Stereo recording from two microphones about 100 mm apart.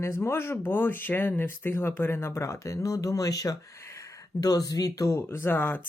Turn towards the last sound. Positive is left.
turn(degrees=20)  # may be behind; listen again after turning